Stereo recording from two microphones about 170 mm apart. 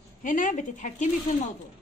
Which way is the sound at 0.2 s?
50° left (ahead or behind).